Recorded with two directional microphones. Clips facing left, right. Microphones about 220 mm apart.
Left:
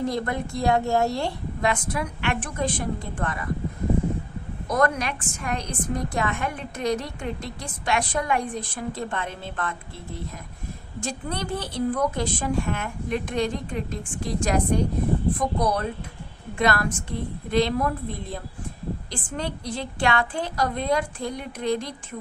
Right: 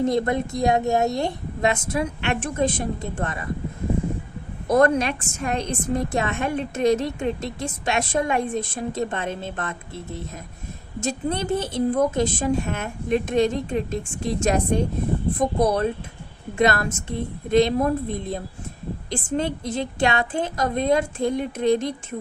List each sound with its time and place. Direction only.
0.0 s a woman's voice: 20° right (ahead or behind)
4.7 s a woman's voice: 25° right (ahead or behind)